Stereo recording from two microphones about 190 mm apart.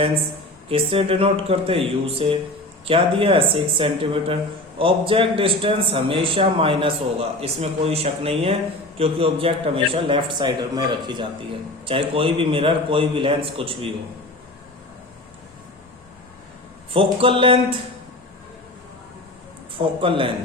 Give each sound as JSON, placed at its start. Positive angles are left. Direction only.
{"t": 0.7, "sound": "a man's voice", "side_deg": -30}
{"t": 16.9, "sound": "a man's voice", "side_deg": -30}
{"t": 20.0, "sound": "a man's voice", "side_deg": -25}